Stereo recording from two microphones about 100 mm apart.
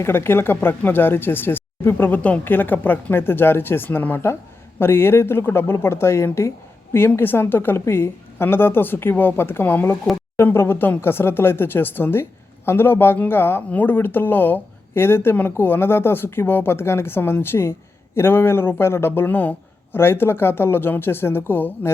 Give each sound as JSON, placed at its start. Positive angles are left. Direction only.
{"t": 0.0, "sound": "speech", "side_deg": 25}